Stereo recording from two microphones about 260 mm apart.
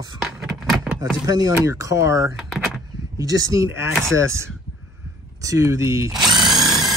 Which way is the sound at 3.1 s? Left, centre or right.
Centre.